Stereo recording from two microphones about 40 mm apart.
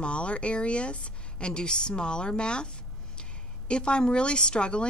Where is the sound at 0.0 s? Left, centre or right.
Left.